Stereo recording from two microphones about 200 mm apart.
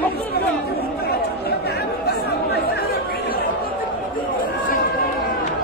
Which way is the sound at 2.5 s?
55° left (ahead or behind).